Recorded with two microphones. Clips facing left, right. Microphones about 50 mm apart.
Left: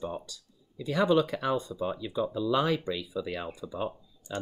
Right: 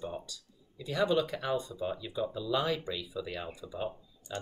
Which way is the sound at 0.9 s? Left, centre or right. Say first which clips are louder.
Left 4 dB; left.